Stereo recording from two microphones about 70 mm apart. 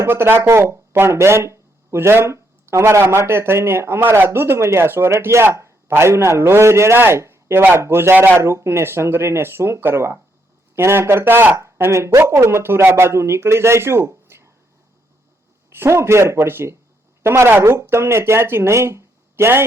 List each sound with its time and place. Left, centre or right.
0.0 s speech: right
11.5 s speech: right
15.7 s speech: right